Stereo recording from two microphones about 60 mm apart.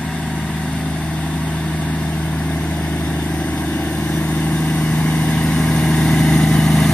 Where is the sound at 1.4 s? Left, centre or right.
Left.